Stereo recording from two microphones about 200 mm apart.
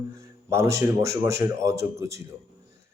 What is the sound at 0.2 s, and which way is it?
A man's voice, 15° right (ahead or behind).